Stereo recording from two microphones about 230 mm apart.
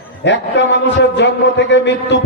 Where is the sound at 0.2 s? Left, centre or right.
Left.